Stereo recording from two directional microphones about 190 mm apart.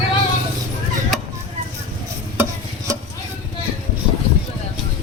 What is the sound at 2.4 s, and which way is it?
Stir, 20° right (ahead or behind).